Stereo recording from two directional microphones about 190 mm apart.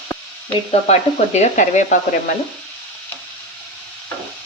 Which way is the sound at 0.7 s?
35° left (ahead or behind).